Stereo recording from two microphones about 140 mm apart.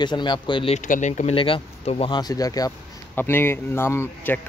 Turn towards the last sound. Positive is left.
turn(degrees=15)  # may be behind; listen again after turning